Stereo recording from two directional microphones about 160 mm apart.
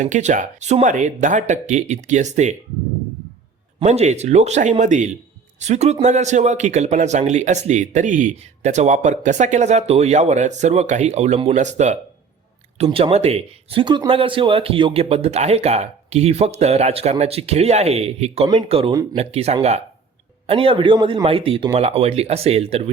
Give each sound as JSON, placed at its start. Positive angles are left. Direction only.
{"t": 0.0, "sound": "a man's voice", "side_deg": -50}
{"t": 3.8, "sound": "a man's voice", "side_deg": -45}
{"t": 12.8, "sound": "a man's voice", "side_deg": -35}